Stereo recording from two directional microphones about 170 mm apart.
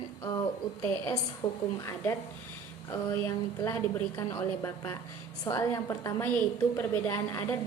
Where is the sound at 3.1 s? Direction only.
20° left (ahead or behind).